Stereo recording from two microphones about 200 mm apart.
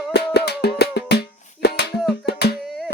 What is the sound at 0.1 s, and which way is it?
Music, 55° left (ahead or behind).